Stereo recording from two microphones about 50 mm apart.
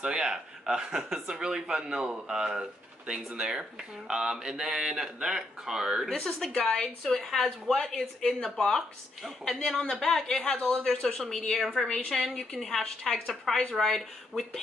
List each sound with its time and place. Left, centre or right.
0.0 s speech: centre
6.0 s a woman's voice: centre